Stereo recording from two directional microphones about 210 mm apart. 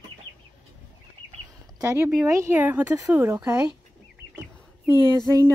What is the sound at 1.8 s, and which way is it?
Speech, 10° right (ahead or behind).